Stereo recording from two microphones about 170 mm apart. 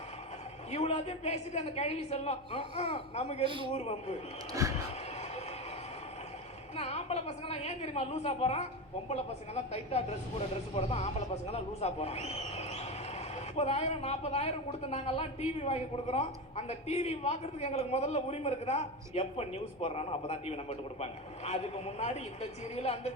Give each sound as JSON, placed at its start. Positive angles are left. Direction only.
{"t": 0.7, "sound": "a man's voice", "side_deg": 40}
{"t": 3.4, "sound": "a man's voice", "side_deg": -30}
{"t": 3.7, "sound": "a man's voice", "side_deg": 35}
{"t": 6.7, "sound": "a man's voice", "side_deg": 40}
{"t": 10.8, "sound": "a man's voice", "side_deg": 40}